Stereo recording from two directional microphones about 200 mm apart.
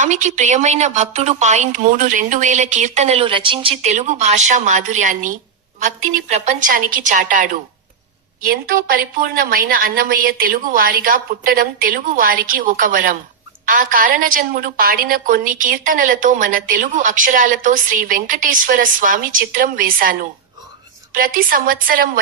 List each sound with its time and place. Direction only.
0.0 s a woman's voice: 35° right (ahead or behind)